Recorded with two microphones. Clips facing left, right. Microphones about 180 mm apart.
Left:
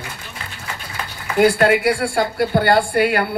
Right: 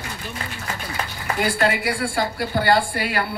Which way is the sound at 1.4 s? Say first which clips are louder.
Left 8 dB; 55° left (ahead or behind).